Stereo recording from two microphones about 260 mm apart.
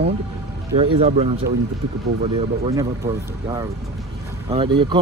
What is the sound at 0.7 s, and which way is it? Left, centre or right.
Speech, right.